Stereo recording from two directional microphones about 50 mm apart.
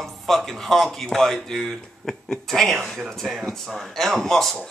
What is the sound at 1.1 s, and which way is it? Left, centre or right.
Speech, centre.